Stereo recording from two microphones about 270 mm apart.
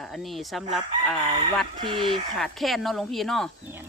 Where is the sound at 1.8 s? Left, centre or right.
Centre.